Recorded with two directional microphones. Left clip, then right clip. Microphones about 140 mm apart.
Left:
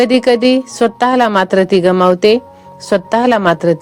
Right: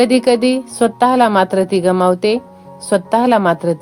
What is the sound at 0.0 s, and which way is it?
A woman's voice, 35° left (ahead or behind).